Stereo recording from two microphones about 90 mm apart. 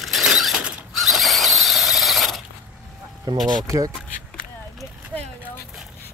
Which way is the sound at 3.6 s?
40° right (ahead or behind).